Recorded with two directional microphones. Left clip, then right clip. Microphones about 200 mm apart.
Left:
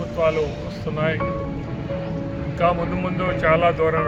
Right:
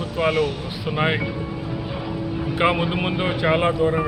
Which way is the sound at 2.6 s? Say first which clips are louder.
Even; 10° right (ahead or behind).